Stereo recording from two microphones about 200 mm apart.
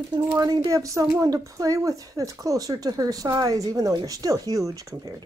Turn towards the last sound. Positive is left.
turn(degrees=-15)  # may be behind; listen again after turning